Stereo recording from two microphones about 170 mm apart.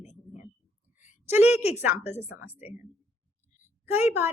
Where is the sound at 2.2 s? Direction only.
10° right (ahead or behind).